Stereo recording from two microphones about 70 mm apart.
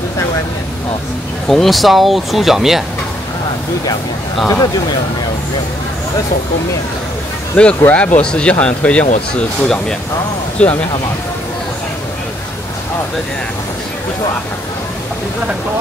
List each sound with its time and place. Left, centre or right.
1.5 s speech: centre
7.6 s speech: left